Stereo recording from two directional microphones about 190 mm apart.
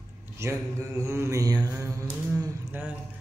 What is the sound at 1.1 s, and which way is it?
Mantra, 15° right (ahead or behind).